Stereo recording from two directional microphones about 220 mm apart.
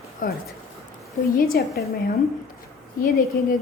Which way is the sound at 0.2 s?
40° left (ahead or behind).